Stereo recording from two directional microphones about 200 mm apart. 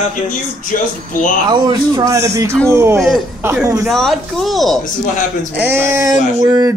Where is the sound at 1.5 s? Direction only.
20° right (ahead or behind).